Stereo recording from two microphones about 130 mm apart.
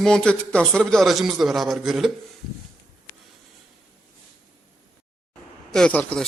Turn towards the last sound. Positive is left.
turn(degrees=10)  # may be behind; listen again after turning